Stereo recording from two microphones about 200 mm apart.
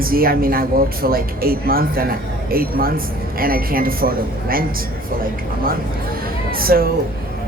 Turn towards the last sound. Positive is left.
turn(degrees=-50)  # may be behind; listen again after turning